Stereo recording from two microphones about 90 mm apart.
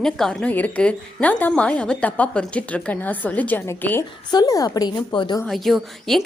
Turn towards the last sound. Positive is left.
turn(degrees=0)  # may be behind; listen again after turning